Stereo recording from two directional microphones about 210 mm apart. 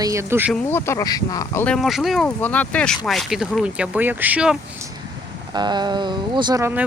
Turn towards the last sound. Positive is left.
turn(degrees=-15)  # may be behind; listen again after turning